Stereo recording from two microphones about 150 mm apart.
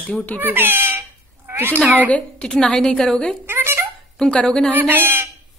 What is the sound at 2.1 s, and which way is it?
A woman's voice, 5° left (ahead or behind).